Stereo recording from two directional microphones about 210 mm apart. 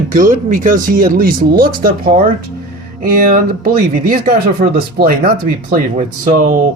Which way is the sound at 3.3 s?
40° right (ahead or behind).